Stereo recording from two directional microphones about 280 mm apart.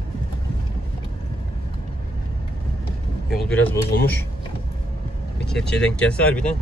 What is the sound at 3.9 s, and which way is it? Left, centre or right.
Speech, left.